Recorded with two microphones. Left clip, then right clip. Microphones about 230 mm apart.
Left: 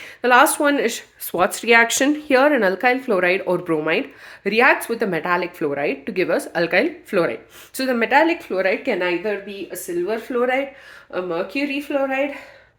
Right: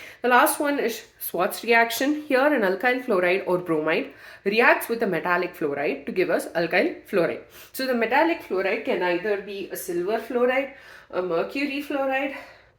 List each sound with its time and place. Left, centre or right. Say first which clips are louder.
0.2 s speech: left 5 dB; left